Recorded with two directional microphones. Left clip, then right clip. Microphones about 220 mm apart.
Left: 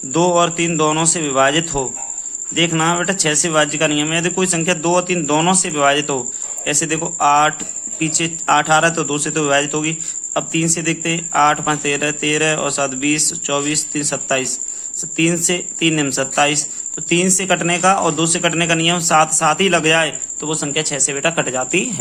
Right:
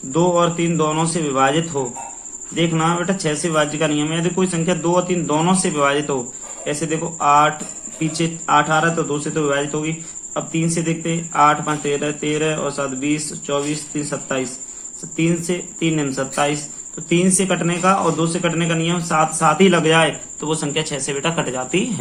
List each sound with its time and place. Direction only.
0.1 s a man's voice: 40° left (ahead or behind)